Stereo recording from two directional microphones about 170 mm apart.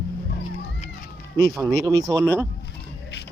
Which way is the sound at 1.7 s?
20° right (ahead or behind).